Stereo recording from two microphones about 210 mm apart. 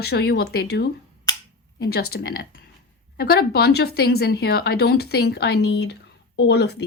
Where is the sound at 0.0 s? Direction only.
50° left (ahead or behind).